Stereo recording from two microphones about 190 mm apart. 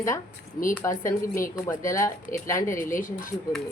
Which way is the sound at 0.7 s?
10° left (ahead or behind).